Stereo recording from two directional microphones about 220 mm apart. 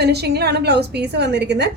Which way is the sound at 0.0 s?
50° right (ahead or behind).